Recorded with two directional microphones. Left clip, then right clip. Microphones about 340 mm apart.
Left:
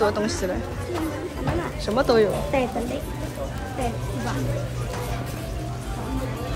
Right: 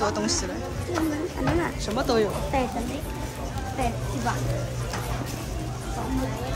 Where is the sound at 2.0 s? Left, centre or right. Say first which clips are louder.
Left 5 dB; centre.